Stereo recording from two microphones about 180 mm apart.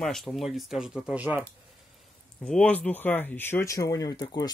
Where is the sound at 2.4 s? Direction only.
5° left (ahead or behind); by 4.5 s 20° left (ahead or behind).